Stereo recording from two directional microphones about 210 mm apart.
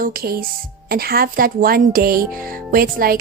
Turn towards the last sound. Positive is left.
turn(degrees=-45)  # may be behind; listen again after turning